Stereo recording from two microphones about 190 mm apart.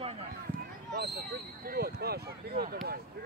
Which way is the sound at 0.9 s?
55° right (ahead or behind).